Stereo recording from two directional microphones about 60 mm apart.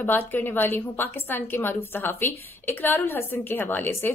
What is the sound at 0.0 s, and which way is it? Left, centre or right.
A woman's voice, left.